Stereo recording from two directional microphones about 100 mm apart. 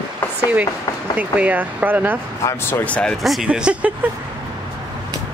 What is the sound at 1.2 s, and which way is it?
Speech, 15° right (ahead or behind).